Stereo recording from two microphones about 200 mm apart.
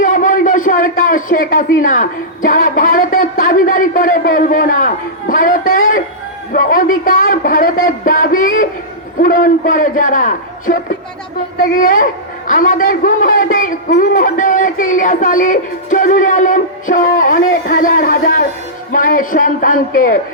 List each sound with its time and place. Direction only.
0.0 s a man's voice: 40° left (ahead or behind)
11.8 s a man's voice: 40° left (ahead or behind)